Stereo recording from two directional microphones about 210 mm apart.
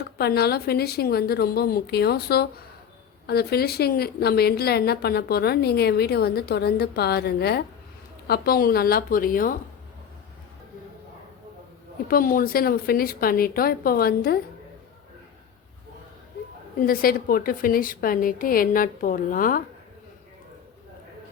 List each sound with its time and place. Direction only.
0.2 s a woman's voice: 50° left (ahead or behind)
12.0 s a woman's voice: 45° left (ahead or behind)
16.8 s a woman's voice: 45° left (ahead or behind)